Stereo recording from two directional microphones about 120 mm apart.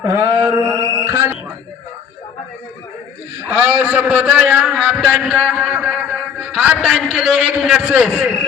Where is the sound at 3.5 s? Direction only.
10° right (ahead or behind).